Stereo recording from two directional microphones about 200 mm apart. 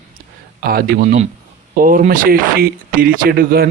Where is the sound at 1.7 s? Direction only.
45° right (ahead or behind).